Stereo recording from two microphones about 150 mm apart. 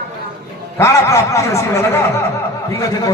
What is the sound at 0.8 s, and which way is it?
Speech, 20° left (ahead or behind).